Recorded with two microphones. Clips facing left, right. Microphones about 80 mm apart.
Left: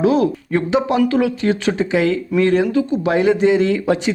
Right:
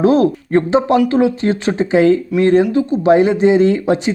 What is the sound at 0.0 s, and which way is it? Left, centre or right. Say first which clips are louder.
Speech: right 3 dB; right.